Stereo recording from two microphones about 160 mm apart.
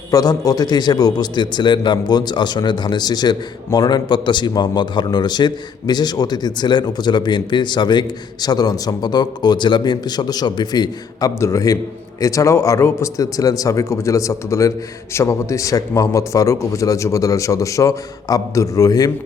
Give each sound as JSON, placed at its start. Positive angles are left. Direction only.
{"t": 0.1, "sound": "speech", "side_deg": 20}